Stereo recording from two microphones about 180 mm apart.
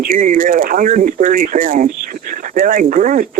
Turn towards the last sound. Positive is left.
turn(degrees=-45)  # may be behind; listen again after turning